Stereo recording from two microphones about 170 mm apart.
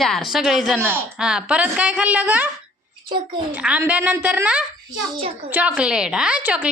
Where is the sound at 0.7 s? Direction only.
15° right (ahead or behind).